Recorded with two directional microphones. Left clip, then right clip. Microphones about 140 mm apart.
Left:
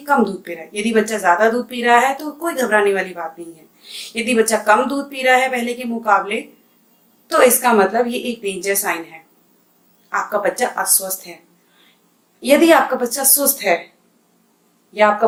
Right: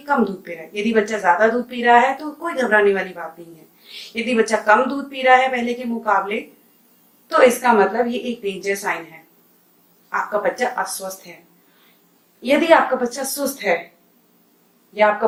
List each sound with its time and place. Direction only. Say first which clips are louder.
0.0 s a woman's voice: left 3 dB; 30° left (ahead or behind)
12.4 s a woman's voice: left 2 dB; 35° left (ahead or behind)